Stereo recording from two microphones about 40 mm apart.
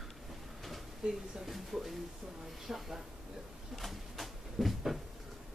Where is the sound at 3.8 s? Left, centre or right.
Centre.